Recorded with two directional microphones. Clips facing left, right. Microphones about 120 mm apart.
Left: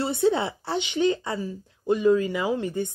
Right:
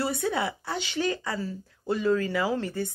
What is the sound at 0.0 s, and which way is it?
Speech, 25° left (ahead or behind).